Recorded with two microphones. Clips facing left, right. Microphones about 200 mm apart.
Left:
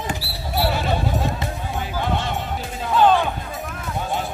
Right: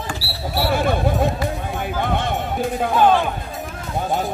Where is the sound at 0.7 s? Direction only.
50° right (ahead or behind).